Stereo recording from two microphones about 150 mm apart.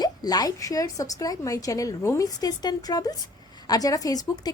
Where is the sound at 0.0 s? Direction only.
25° left (ahead or behind).